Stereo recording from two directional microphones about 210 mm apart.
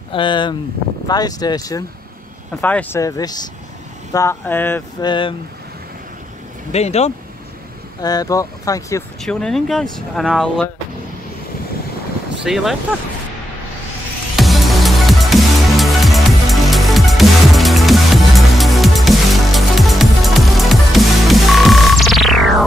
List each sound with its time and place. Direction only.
0.1 s speech: 25° left (ahead or behind)
5.0 s speech: 20° left (ahead or behind)
6.7 s speech: 30° left (ahead or behind)
8.0 s speech: 20° left (ahead or behind)
9.2 s speech: centre (ahead or behind)
12.4 s speech: centre (ahead or behind)
14.3 s music: centre (ahead or behind)